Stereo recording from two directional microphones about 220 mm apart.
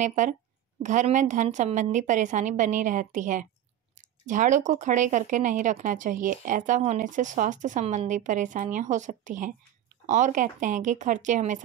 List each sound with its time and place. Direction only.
0.0 s speech: 35° right (ahead or behind)